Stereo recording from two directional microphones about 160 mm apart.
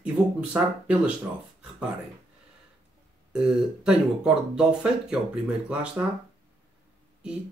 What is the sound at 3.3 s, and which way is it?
Speech, 5° right (ahead or behind).